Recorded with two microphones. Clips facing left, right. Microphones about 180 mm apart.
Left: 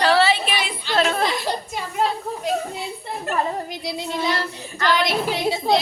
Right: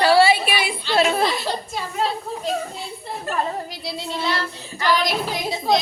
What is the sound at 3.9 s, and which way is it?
Child singing, 15° left (ahead or behind).